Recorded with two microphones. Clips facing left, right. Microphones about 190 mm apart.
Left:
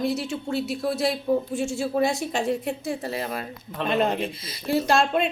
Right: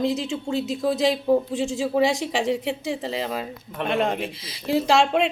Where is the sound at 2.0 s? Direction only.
90° right.